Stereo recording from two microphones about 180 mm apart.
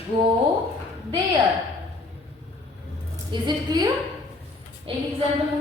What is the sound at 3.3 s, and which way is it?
Speech, 25° right (ahead or behind).